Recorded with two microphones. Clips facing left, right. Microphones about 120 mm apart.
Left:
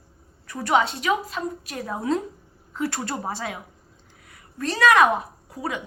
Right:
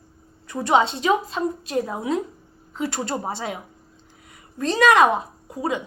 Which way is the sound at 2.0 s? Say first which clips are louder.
Even; 10° right (ahead or behind).